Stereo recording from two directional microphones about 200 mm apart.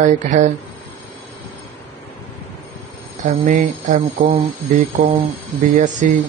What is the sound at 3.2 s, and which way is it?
Speech, 35° right (ahead or behind).